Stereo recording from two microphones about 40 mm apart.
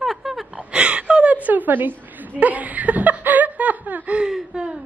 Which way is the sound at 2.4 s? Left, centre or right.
Right.